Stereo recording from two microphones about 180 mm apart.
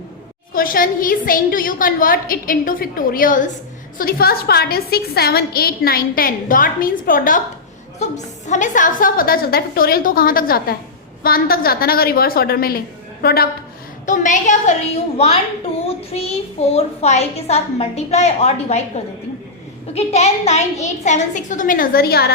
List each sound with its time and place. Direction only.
0.5 s a woman's voice: 50° left (ahead or behind)
14.1 s a woman's voice: 45° left (ahead or behind)
19.9 s a woman's voice: 35° left (ahead or behind); by 22.3 s 60° left (ahead or behind)